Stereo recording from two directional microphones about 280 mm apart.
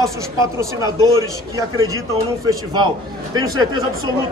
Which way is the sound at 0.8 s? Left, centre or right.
Centre.